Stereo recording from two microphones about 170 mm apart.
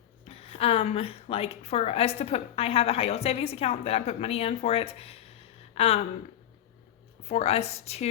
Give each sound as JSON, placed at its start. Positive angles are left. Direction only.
{"t": 0.3, "sound": "a woman's voice", "side_deg": 35}
{"t": 5.7, "sound": "a sound", "side_deg": 35}
{"t": 7.3, "sound": "a woman's voice", "side_deg": 35}